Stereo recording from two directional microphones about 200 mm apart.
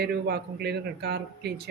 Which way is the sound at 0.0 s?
50° right (ahead or behind).